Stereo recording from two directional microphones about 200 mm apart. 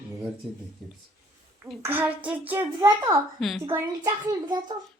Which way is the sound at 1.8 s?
10° right (ahead or behind).